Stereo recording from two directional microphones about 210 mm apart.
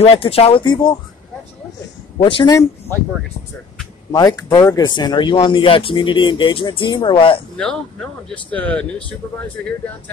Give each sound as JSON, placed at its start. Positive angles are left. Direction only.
{"t": 0.0, "sound": "speech", "side_deg": 25}
{"t": 2.2, "sound": "speech", "side_deg": 20}
{"t": 4.1, "sound": "speech", "side_deg": 15}
{"t": 7.5, "sound": "speech", "side_deg": 5}